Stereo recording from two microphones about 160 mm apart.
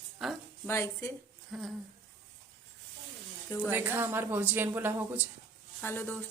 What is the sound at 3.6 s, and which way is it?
A woman's voice, 10° right (ahead or behind).